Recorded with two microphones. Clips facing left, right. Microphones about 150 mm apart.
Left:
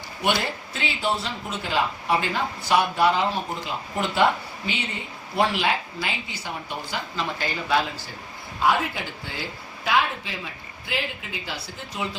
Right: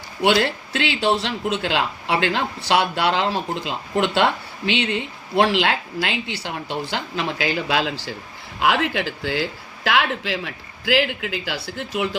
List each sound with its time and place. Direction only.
0.2 s speech: 80° right